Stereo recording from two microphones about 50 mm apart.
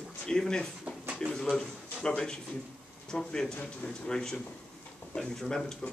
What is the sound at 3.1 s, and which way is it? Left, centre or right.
Speech, centre.